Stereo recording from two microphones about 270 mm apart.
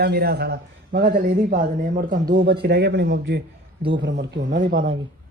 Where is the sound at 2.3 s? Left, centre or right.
Right.